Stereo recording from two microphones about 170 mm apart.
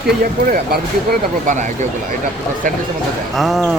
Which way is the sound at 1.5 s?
45° right (ahead or behind).